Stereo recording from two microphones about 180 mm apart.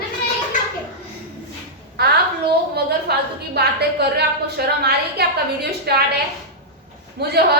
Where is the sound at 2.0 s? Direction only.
65° right (ahead or behind).